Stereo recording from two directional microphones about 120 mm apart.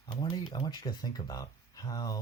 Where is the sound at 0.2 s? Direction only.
30° left (ahead or behind).